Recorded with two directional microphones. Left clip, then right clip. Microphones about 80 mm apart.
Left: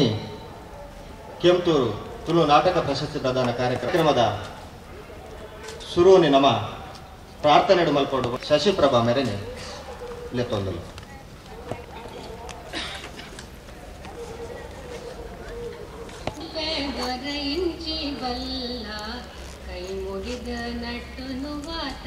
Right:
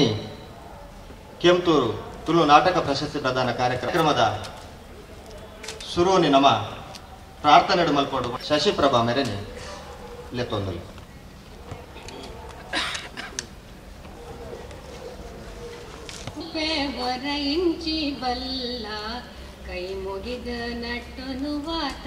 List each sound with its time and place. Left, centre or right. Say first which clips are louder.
1.4 s a man's voice: right 1 dB; right
5.7 s a man's voice: left 5 dB; right
10.3 s a man's voice: left 1 dB; right
12.7 s a sound: right 6 dB; right
16.5 s a sound: right 2 dB; right
17.1 s a man's voice: right 2 dB; right
20.4 s a man's voice: right 1 dB; right